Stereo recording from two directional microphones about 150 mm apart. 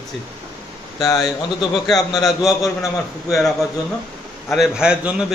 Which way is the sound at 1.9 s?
Centre (ahead or behind).